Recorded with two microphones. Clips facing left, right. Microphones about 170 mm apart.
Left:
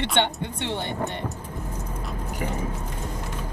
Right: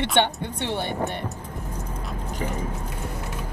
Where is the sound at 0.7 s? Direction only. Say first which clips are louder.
Right 2 dB; 15° right (ahead or behind).